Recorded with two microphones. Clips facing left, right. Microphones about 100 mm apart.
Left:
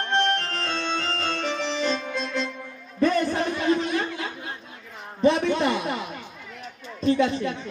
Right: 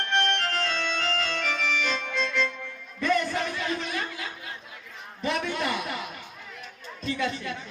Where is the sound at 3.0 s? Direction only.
35° left (ahead or behind).